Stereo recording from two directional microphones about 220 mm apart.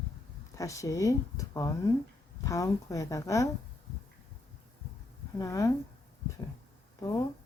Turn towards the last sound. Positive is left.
turn(degrees=15)  # may be behind; listen again after turning